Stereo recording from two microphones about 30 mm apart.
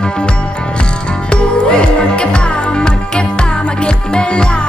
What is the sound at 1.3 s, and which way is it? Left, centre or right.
Music, left.